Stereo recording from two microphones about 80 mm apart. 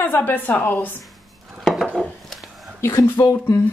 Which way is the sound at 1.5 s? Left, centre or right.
Centre.